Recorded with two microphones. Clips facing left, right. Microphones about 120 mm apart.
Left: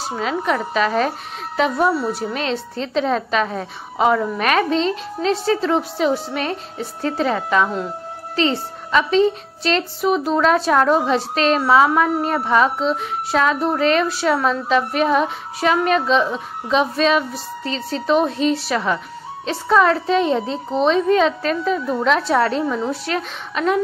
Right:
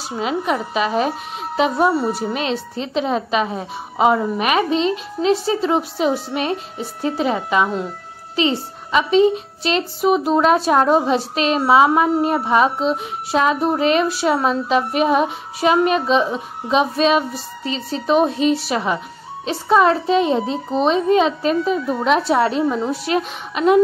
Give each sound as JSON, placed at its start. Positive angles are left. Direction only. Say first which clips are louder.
{"t": 0.2, "sound": "a woman's voice", "louder": "right 1 dB", "side_deg": -15}